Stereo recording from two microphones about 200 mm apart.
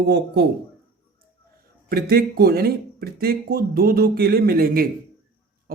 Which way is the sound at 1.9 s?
50° right (ahead or behind).